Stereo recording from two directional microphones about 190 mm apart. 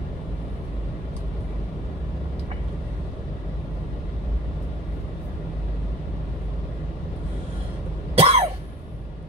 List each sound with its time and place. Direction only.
8.2 s cough: 30° right (ahead or behind)